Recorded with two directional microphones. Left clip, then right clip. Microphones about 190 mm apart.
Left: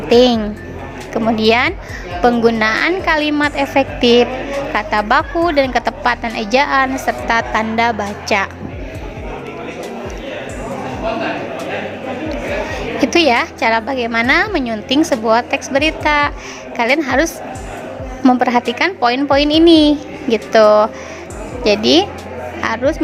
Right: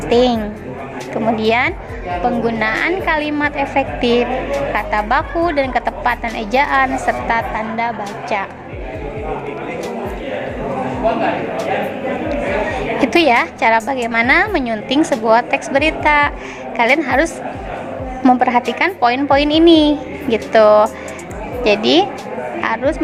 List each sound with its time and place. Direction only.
0.1 s a woman's voice: 35° left (ahead or behind)
13.0 s a woman's voice: 30° left (ahead or behind)
22.6 s a sound: 35° left (ahead or behind)